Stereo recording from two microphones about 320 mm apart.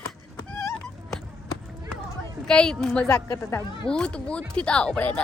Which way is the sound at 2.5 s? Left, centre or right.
Centre.